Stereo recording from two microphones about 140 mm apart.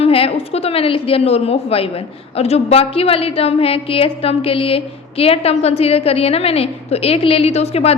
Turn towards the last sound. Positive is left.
turn(degrees=50)  # may be behind; listen again after turning